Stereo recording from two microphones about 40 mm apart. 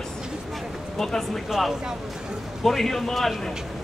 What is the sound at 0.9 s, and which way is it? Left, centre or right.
Speech, centre.